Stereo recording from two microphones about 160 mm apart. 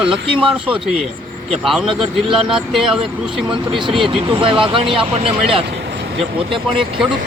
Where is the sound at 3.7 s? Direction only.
30° right (ahead or behind).